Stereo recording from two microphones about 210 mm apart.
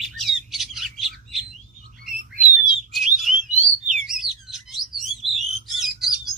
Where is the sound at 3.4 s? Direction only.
35° right (ahead or behind).